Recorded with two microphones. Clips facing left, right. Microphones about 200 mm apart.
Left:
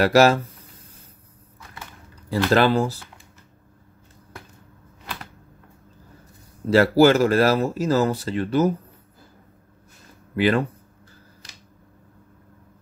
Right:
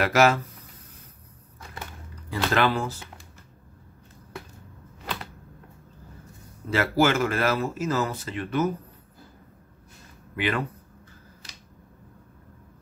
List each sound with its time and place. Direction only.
0.0 s a man's voice: 35° left (ahead or behind)
2.5 s a man's voice: 35° left (ahead or behind)
6.7 s a man's voice: 35° left (ahead or behind)
10.3 s speech: 35° left (ahead or behind)